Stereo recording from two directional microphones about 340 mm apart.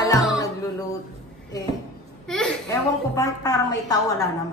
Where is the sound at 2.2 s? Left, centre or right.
Centre.